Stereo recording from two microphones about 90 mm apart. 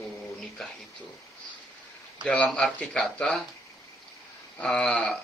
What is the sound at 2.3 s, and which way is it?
Speech, 15° left (ahead or behind).